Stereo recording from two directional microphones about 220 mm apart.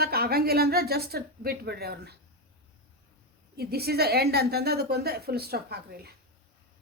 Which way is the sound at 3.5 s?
45° right (ahead or behind).